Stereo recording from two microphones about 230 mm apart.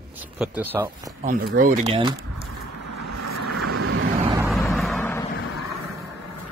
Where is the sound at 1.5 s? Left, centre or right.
Right.